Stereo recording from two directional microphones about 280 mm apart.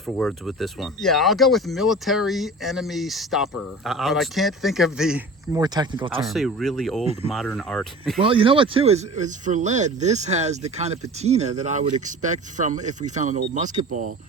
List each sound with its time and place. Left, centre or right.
0.0 s speech: centre
6.2 s speech: centre
8.2 s speech: centre